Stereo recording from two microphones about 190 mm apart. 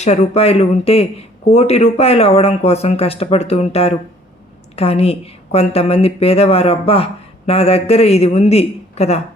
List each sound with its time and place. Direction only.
0.0 s a woman's voice: 35° left (ahead or behind)